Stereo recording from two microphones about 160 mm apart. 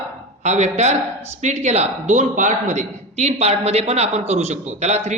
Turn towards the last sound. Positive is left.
turn(degrees=-45)  # may be behind; listen again after turning